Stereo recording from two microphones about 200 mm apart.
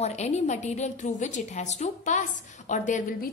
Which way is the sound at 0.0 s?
35° left (ahead or behind).